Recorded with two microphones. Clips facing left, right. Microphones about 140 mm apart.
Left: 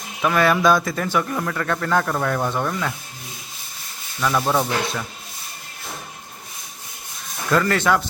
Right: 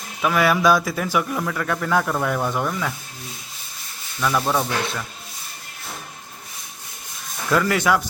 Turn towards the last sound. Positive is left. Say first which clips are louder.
# even
turn(degrees=-10)  # may be behind; listen again after turning